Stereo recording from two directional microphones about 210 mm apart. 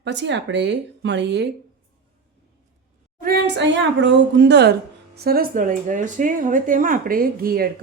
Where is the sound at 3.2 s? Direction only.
50° right (ahead or behind).